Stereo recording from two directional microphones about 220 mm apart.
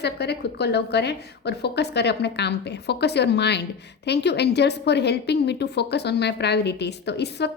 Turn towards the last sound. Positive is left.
turn(degrees=50)  # may be behind; listen again after turning